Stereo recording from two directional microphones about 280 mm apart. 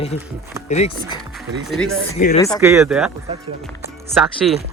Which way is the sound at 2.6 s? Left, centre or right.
Centre.